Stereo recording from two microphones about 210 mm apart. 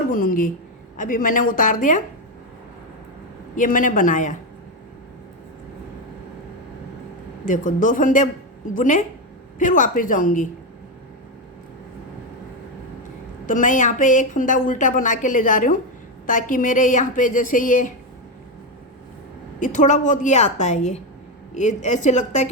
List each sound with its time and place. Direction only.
0.1 s speech: 40° left (ahead or behind)
3.5 s speech: 40° left (ahead or behind)
7.4 s speech: 40° left (ahead or behind)
13.5 s speech: 40° left (ahead or behind)
19.5 s speech: 40° left (ahead or behind)